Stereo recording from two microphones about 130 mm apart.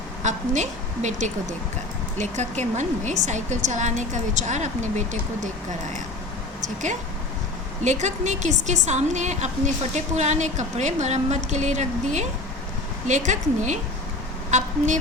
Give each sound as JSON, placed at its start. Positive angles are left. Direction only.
{"t": 0.2, "sound": "a woman's voice", "side_deg": -65}
{"t": 7.9, "sound": "a woman's voice", "side_deg": -65}